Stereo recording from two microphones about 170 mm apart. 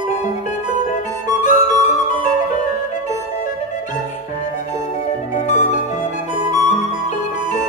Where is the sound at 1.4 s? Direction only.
45° left (ahead or behind).